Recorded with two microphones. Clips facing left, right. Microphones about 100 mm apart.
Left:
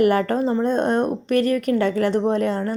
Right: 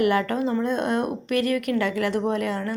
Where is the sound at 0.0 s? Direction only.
40° left (ahead or behind).